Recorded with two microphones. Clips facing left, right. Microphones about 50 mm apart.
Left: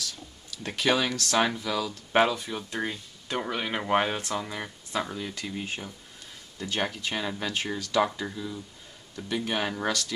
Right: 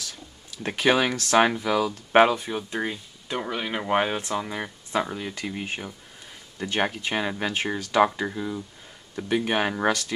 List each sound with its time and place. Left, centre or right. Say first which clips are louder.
0.0 s speech: left 1 dB; right